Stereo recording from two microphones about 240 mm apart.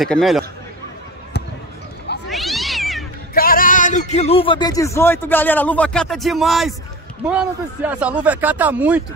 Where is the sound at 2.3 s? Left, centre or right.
Centre.